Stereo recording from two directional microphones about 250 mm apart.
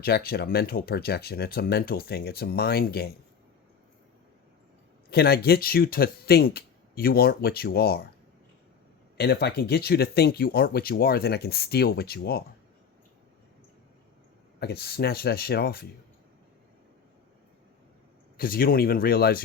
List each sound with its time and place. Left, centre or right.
0.0 s speech: left
5.1 s speech: left
9.1 s speech: left
14.6 s speech: left
18.3 s speech: left